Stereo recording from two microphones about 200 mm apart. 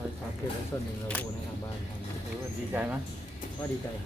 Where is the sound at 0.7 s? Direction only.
10° left (ahead or behind).